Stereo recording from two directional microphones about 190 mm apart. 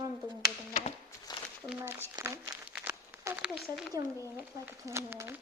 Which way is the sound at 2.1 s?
20° right (ahead or behind).